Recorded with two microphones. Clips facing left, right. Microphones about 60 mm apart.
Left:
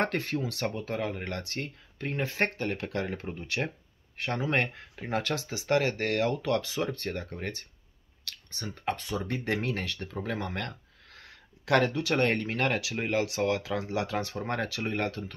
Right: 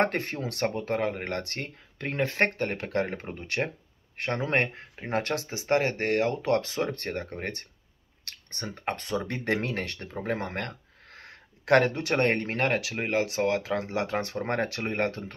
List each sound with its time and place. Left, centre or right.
0.0 s speech: right